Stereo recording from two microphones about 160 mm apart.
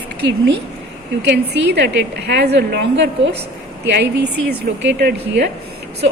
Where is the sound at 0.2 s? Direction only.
90° right.